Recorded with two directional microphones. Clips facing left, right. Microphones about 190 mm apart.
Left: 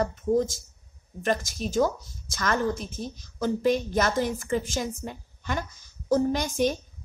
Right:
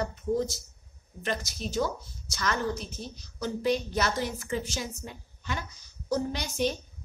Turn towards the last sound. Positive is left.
turn(degrees=50)  # may be behind; listen again after turning